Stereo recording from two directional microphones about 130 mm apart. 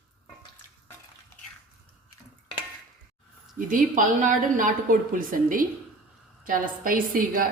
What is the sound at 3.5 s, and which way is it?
A woman's voice, 90° right.